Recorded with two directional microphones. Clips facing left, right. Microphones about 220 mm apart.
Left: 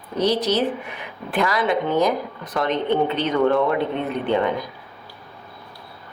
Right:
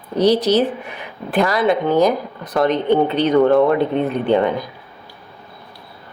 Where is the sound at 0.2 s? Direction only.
35° right (ahead or behind).